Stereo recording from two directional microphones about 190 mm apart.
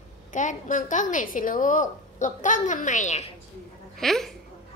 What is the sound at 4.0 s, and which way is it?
Speech, centre (ahead or behind).